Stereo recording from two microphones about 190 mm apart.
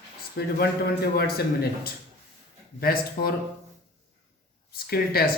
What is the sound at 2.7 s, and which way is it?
Speech, 50° left (ahead or behind).